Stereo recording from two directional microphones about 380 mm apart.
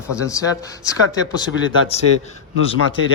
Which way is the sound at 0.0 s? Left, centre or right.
Centre.